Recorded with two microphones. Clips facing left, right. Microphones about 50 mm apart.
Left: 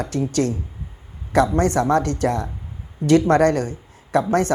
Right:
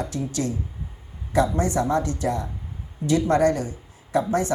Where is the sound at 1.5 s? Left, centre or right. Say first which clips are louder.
Left 5 dB; left.